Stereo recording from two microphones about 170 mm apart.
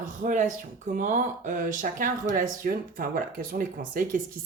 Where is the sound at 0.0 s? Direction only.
50° right (ahead or behind).